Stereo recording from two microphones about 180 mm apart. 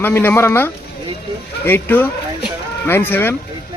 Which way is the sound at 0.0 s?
10° left (ahead or behind).